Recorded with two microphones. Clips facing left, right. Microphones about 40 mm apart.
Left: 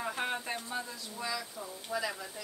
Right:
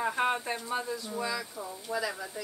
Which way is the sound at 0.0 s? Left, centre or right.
Centre.